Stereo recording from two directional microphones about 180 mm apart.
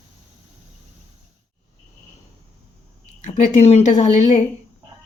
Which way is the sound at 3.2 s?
40° left (ahead or behind).